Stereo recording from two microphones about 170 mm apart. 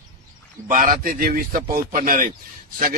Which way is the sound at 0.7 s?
50° right (ahead or behind).